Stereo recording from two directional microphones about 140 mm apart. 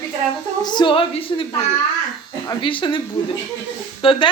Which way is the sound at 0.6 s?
35° left (ahead or behind).